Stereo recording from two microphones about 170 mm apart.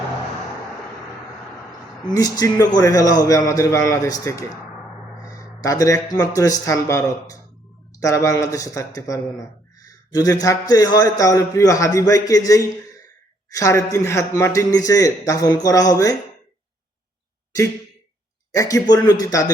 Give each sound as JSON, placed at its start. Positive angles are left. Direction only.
{"t": 2.0, "sound": "a man's voice", "side_deg": 20}
{"t": 13.5, "sound": "a man's voice", "side_deg": 20}
{"t": 18.5, "sound": "a man's voice", "side_deg": 20}